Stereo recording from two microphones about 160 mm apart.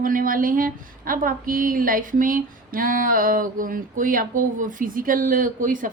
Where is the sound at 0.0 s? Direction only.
60° right (ahead or behind).